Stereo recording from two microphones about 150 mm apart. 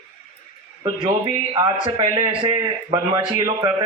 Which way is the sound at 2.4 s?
30° right (ahead or behind).